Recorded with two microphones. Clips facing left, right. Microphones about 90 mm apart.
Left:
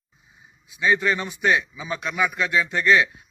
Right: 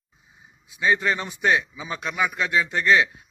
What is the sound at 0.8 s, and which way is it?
A man's voice, 35° right (ahead or behind).